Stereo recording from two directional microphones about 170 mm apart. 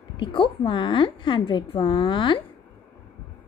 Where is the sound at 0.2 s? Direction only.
30° left (ahead or behind).